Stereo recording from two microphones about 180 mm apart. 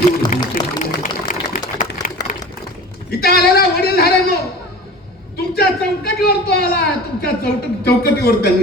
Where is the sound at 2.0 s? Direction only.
50° left (ahead or behind).